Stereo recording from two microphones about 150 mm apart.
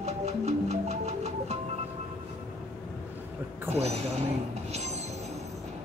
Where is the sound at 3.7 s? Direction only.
45° right (ahead or behind).